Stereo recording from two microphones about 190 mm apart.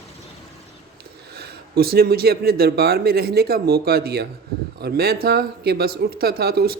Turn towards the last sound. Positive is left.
turn(degrees=-55)  # may be behind; listen again after turning